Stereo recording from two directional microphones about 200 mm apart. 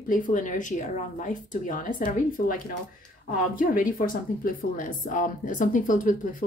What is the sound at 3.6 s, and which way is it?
Speech, 45° left (ahead or behind).